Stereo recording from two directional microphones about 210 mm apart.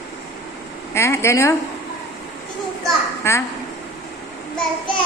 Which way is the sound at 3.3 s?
10° left (ahead or behind).